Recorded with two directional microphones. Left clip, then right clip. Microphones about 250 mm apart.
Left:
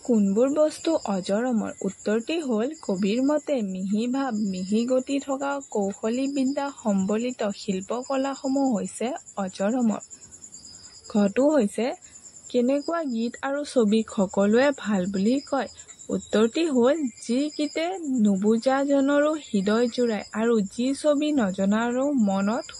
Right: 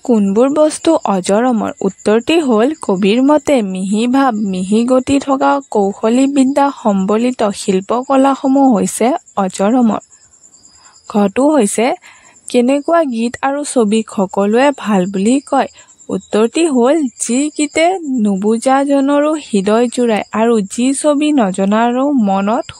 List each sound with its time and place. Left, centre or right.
0.0 s speech: right
11.1 s speech: right